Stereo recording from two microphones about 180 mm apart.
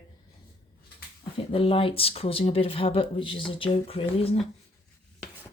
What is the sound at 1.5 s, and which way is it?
Speech, 30° left (ahead or behind).